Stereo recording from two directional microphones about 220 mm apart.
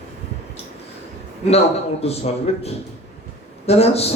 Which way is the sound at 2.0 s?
30° left (ahead or behind).